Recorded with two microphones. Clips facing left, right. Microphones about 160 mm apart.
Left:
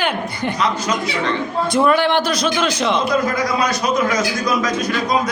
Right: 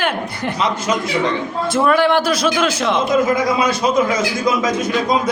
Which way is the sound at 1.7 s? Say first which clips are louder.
Right 1 dB; centre (ahead or behind).